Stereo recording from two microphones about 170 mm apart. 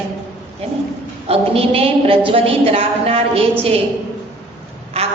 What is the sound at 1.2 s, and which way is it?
A woman's voice, 35° right (ahead or behind).